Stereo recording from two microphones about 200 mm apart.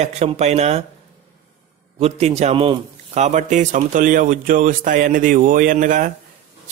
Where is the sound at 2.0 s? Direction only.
30° right (ahead or behind).